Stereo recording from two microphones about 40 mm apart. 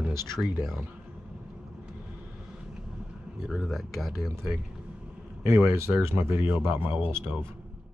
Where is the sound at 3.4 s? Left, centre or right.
Centre.